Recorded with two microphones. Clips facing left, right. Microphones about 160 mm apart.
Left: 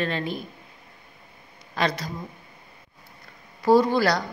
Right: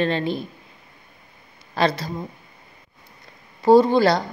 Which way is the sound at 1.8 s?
30° right (ahead or behind).